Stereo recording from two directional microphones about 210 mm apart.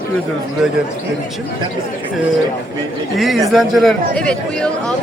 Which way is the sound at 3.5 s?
Centre (ahead or behind).